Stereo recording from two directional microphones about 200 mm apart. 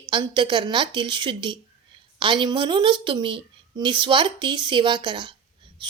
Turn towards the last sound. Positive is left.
turn(degrees=-20)  # may be behind; listen again after turning